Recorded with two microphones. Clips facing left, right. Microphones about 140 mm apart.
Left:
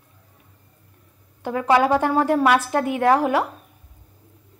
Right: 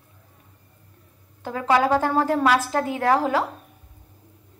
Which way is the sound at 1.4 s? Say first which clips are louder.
Left 2 dB; 20° left (ahead or behind).